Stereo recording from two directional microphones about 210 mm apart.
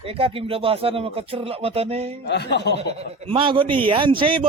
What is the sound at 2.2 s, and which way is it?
Speech, 55° left (ahead or behind).